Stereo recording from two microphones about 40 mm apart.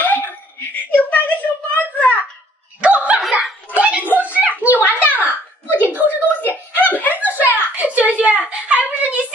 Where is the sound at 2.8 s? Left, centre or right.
Right.